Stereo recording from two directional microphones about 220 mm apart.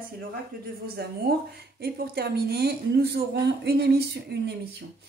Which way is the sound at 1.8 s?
45° right (ahead or behind).